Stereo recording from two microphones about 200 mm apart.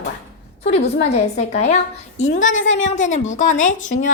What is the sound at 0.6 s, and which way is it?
A woman's voice, 30° left (ahead or behind).